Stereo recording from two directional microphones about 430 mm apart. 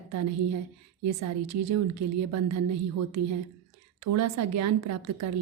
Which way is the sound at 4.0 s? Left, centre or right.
Right.